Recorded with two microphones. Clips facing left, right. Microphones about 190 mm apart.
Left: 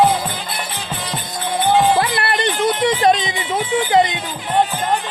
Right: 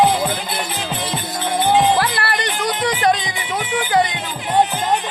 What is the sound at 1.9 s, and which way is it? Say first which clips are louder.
Music: left 1 dB; 20° left (ahead or behind).